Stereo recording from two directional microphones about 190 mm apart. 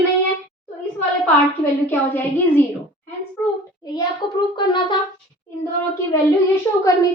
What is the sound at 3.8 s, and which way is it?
Speech, 20° left (ahead or behind).